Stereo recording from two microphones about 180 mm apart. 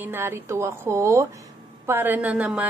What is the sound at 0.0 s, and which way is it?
Speech, 10° right (ahead or behind).